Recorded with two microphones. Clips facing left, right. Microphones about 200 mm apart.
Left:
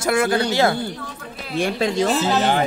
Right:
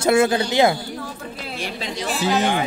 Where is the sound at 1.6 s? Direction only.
50° left (ahead or behind).